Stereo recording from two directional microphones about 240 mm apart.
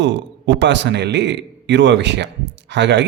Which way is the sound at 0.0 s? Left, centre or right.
Right.